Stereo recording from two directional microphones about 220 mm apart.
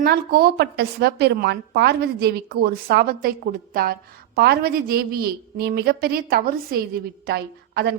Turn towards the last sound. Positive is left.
turn(degrees=-50)  # may be behind; listen again after turning